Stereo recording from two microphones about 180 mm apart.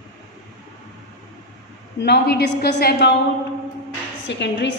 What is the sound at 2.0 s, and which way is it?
A woman's voice, 65° left (ahead or behind).